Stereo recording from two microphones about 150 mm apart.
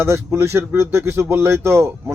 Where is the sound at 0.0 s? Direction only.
15° right (ahead or behind).